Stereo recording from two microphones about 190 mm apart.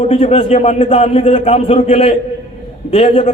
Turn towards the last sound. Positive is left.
turn(degrees=30)  # may be behind; listen again after turning